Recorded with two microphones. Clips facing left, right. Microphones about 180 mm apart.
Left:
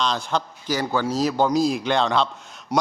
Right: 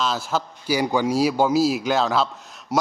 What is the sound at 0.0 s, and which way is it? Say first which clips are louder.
A man's voice: even; 5° right (ahead or behind).